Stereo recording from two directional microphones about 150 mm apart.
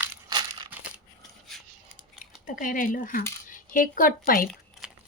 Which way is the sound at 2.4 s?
65° left (ahead or behind).